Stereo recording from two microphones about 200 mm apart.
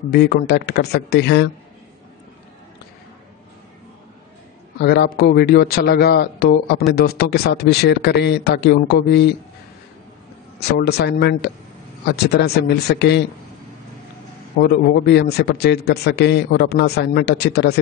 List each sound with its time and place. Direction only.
0.1 s a man's voice: 55° left (ahead or behind)
4.7 s a man's voice: 55° left (ahead or behind)
10.6 s a man's voice: 55° left (ahead or behind)
14.6 s a man's voice: 55° left (ahead or behind)